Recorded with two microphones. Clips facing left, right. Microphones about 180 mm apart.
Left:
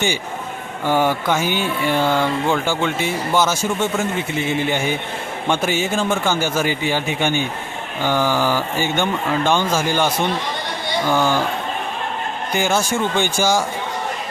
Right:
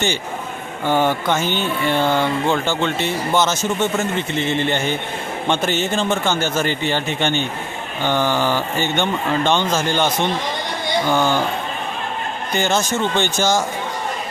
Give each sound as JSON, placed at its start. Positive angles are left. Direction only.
{"t": 0.9, "sound": "speech", "side_deg": 10}
{"t": 11.1, "sound": "speech", "side_deg": -15}
{"t": 12.5, "sound": "speech", "side_deg": 10}